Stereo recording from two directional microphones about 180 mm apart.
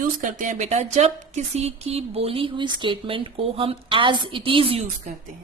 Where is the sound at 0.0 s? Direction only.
45° right (ahead or behind); by 4.9 s 30° right (ahead or behind).